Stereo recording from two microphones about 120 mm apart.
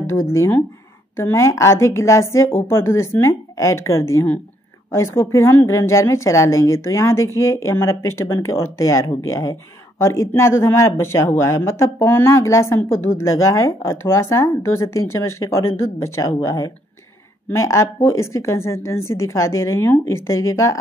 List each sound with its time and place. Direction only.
0.0 s speech: 20° left (ahead or behind)